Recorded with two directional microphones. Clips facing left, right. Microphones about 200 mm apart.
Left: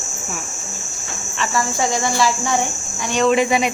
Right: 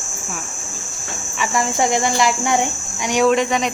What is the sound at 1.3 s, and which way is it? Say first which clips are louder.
Speech: right 1 dB; 15° right (ahead or behind).